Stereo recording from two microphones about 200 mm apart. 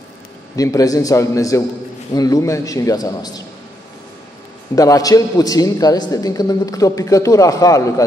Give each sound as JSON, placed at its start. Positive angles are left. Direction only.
{"t": 0.6, "sound": "a man's voice", "side_deg": 15}
{"t": 4.7, "sound": "a man's voice", "side_deg": 15}